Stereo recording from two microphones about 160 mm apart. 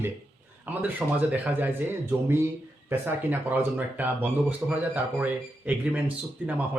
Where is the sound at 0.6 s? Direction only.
10° right (ahead or behind).